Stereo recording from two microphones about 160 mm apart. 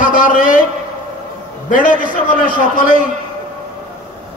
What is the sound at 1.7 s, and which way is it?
A man's voice, 55° left (ahead or behind).